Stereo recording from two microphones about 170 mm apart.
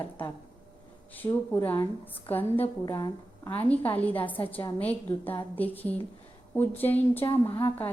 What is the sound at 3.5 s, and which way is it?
A woman's voice, 10° left (ahead or behind).